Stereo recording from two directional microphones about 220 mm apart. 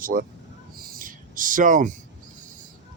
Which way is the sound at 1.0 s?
40° right (ahead or behind).